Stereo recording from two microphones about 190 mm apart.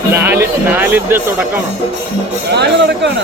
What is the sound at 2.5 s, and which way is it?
Speech, 65° right (ahead or behind).